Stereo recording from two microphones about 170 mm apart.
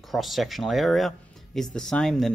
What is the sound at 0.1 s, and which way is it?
Speech, centre (ahead or behind).